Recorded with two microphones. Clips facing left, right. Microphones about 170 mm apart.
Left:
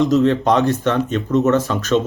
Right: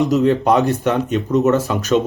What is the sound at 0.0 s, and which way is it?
Speech, 15° right (ahead or behind).